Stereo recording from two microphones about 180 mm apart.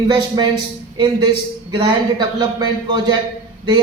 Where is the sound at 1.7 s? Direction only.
25° right (ahead or behind).